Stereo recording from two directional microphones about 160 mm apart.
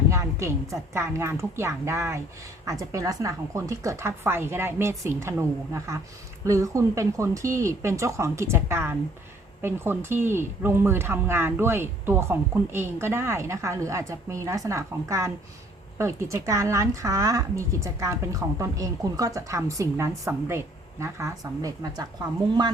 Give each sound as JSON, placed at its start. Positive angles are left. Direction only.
{"t": 0.1, "sound": "speech", "side_deg": -20}
{"t": 6.4, "sound": "speech", "side_deg": -20}